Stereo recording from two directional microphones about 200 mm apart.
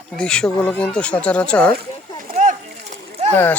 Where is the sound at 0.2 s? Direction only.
5° left (ahead or behind).